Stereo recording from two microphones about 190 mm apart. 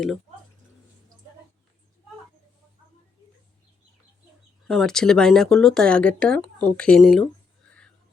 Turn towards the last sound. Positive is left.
turn(degrees=0)  # may be behind; listen again after turning